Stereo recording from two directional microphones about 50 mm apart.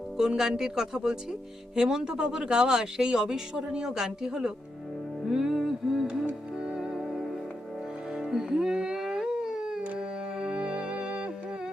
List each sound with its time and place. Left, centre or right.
0.2 s speech: centre
5.3 s music: centre
6.1 s music: centre
9.0 s howl: centre
10.0 s music: centre